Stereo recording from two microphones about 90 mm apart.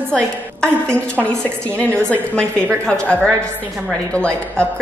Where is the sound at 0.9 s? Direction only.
25° right (ahead or behind).